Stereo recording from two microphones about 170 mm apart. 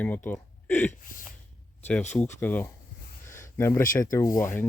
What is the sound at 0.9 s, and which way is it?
Gasp, 50° left (ahead or behind).